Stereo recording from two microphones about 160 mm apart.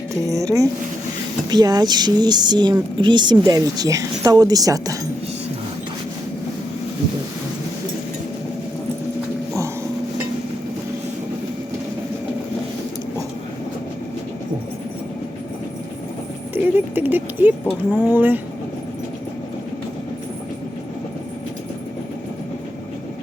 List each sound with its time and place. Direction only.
0.3 s speech: 20° right (ahead or behind)
16.7 s a sound: 10° right (ahead or behind)
17.7 s speech: 10° right (ahead or behind)